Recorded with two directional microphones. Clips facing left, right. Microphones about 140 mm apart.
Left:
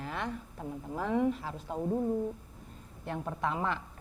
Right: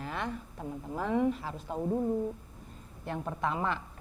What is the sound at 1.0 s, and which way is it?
Speech, 15° right (ahead or behind).